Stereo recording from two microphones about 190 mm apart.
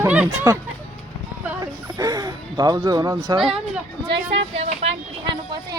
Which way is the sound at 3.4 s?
5° right (ahead or behind).